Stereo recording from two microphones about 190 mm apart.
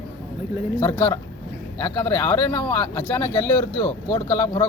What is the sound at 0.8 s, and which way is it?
Speech, 15° left (ahead or behind).